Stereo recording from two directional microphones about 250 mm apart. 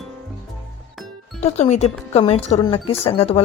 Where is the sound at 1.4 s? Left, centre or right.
Left.